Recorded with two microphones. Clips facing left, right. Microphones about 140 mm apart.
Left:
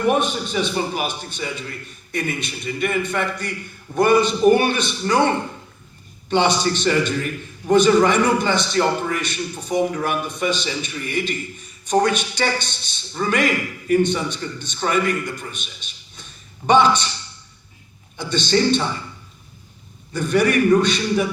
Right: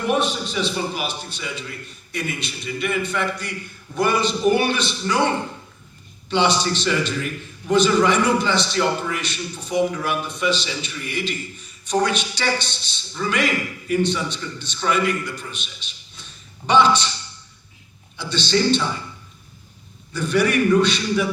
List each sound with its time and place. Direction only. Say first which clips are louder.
0.1 s a man's voice: left 2 dB; 50° left (ahead or behind)
6.3 s a man's voice: left 1 dB; 50° left (ahead or behind)
18.2 s a man's voice: left 2 dB; 50° left (ahead or behind)
20.1 s a man's voice: left 2 dB; 50° left (ahead or behind)